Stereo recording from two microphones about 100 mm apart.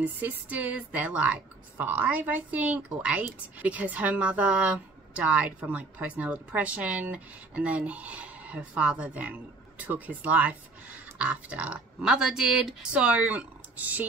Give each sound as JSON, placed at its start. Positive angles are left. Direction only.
{"t": 0.0, "sound": "a woman's voice", "side_deg": -15}